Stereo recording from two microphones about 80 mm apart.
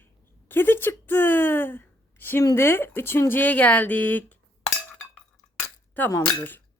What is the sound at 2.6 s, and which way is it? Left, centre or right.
Speech, left.